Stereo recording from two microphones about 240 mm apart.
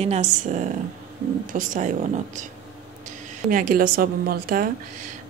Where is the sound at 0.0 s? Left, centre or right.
Right.